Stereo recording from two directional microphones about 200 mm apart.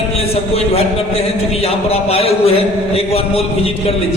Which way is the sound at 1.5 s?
30° left (ahead or behind).